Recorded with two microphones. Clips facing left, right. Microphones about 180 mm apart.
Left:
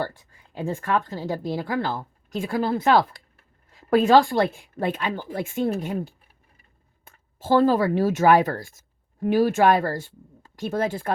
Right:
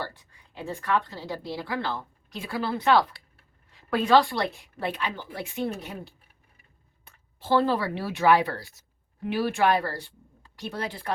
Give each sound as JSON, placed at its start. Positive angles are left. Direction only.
{"t": 0.0, "sound": "a woman's voice", "side_deg": 45}